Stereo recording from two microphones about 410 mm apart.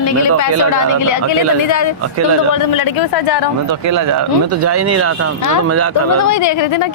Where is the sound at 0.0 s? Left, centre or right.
Left.